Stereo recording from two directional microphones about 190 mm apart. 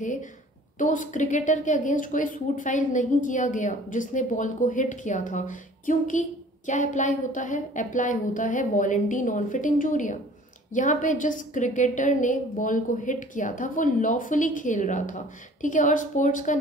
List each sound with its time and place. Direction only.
0.0 s a woman's voice: 40° left (ahead or behind)